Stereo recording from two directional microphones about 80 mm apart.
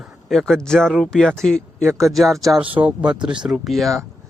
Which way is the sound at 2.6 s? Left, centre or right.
Right.